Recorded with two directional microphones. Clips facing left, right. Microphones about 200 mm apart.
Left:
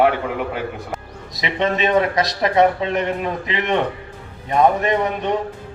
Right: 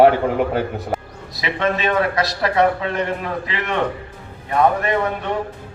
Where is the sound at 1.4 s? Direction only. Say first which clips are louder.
Left 1 dB; 20° left (ahead or behind).